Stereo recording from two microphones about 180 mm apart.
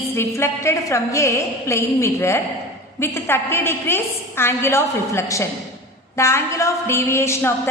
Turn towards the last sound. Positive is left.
turn(degrees=15)  # may be behind; listen again after turning